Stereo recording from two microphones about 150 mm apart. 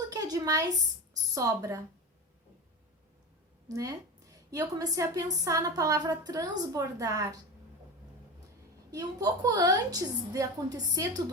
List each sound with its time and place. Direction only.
0.1 s a sound: 25° right (ahead or behind)
1.1 s a woman's voice: 20° right (ahead or behind)
3.7 s a woman's voice: 20° right (ahead or behind)
8.9 s a woman's voice: 25° right (ahead or behind)